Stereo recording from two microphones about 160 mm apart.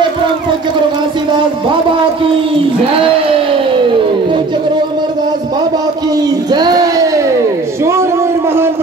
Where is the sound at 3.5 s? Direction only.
30° right (ahead or behind).